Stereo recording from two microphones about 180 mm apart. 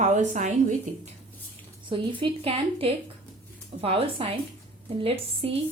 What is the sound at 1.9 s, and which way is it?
A woman's voice, 30° right (ahead or behind).